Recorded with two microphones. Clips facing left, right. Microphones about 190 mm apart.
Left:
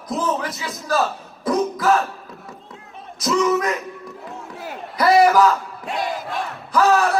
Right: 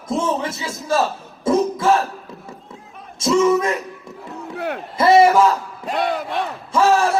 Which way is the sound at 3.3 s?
Centre (ahead or behind).